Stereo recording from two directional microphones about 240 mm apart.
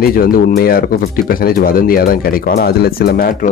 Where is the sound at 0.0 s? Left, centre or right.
Left.